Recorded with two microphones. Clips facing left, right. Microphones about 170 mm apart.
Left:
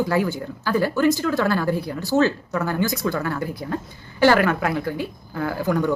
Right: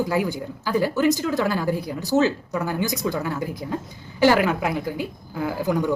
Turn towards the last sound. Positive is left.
turn(degrees=-15)  # may be behind; listen again after turning